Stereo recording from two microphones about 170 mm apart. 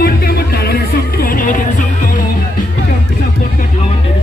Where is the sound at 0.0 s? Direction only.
60° left (ahead or behind).